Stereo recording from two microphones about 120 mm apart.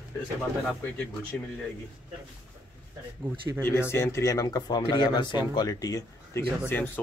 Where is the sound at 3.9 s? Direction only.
20° left (ahead or behind).